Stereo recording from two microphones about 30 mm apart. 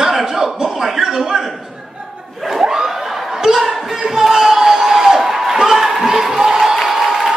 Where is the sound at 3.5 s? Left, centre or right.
Centre.